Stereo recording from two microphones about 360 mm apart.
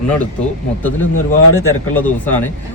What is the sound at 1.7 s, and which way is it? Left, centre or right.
Speech, centre.